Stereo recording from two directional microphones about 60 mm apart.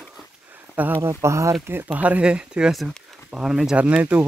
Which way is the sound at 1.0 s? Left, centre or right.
Right.